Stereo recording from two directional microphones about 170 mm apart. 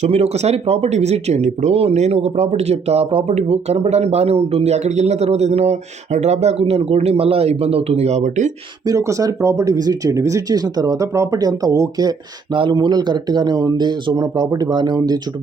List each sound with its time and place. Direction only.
0.0 s speech: 40° right (ahead or behind)
8.9 s speech: 20° right (ahead or behind)